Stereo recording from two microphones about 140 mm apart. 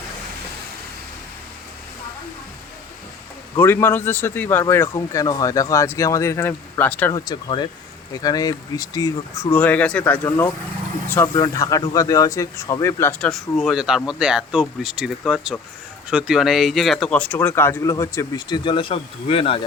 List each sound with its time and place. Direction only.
3.6 s speech: 15° left (ahead or behind)
7.1 s speech: 30° left (ahead or behind)